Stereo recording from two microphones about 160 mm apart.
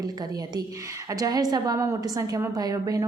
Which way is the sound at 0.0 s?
25° right (ahead or behind).